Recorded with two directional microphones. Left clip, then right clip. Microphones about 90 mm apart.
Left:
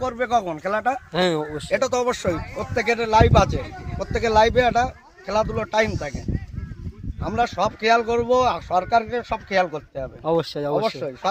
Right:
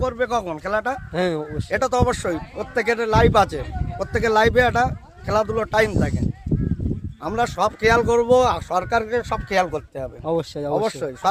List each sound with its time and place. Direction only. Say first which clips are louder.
0.0 s speech: even; 5° right (ahead or behind)
0.4 s speech: even; 20° right (ahead or behind)
1.2 s speech: left 2 dB; 5° left (ahead or behind)
1.7 s speech: right 1 dB; 30° right (ahead or behind)
4.0 s speech: even; 55° right (ahead or behind)
5.3 s speech: right 2 dB; 50° right (ahead or behind)
7.3 s speech: right 1 dB; 45° right (ahead or behind)
10.2 s speech: left 2 dB; 5° left (ahead or behind)
10.8 s speech: right 1 dB; 45° right (ahead or behind)